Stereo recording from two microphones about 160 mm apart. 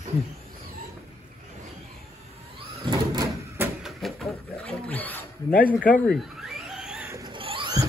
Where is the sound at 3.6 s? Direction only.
Centre (ahead or behind).